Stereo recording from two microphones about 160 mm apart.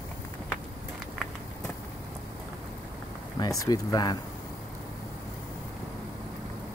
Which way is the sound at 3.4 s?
25° left (ahead or behind).